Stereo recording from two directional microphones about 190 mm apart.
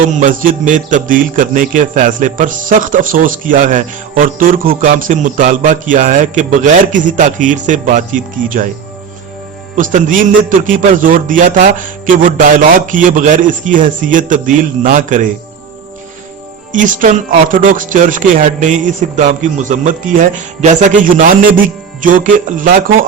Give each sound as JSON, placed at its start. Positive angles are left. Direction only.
{"t": 0.2, "sound": "a man's voice", "side_deg": -45}
{"t": 9.7, "sound": "a man's voice", "side_deg": -45}
{"t": 16.7, "sound": "a man's voice", "side_deg": -45}